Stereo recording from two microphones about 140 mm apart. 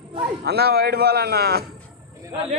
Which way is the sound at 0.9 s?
90° right.